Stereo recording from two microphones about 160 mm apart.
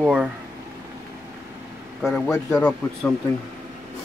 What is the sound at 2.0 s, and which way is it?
A man's voice, 5° left (ahead or behind).